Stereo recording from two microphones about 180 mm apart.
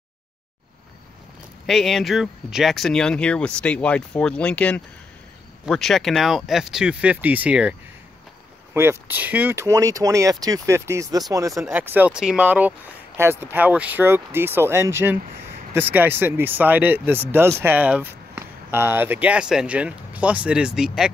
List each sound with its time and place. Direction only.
1.7 s speech: centre (ahead or behind)
8.7 s speech: 10° right (ahead or behind)